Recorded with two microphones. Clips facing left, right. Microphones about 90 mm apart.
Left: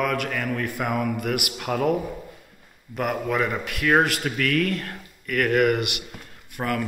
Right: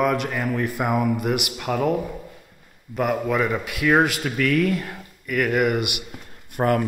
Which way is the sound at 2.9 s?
Centre (ahead or behind).